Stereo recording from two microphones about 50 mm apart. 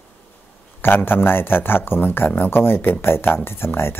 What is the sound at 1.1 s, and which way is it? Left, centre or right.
Speech, left.